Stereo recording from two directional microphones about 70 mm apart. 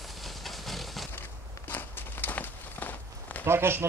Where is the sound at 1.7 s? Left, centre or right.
Left.